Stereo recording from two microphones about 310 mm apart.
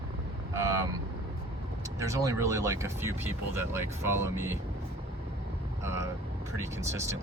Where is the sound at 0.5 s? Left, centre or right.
Centre.